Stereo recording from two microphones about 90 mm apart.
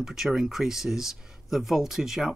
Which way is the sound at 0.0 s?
5° right (ahead or behind).